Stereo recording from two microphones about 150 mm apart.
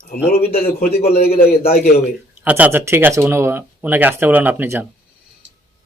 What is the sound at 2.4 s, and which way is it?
Speech, 10° right (ahead or behind).